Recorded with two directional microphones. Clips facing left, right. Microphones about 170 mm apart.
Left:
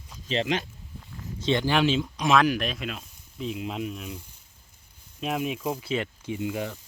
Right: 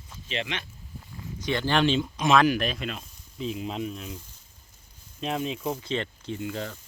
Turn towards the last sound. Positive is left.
turn(degrees=15)  # may be behind; listen again after turning